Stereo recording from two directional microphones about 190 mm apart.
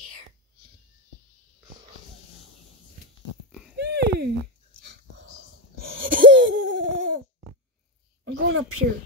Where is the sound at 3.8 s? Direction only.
60° right (ahead or behind).